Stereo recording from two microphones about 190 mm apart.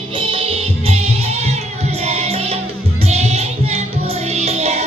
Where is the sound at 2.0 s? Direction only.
35° right (ahead or behind).